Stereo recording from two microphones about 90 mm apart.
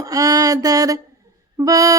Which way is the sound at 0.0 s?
40° right (ahead or behind).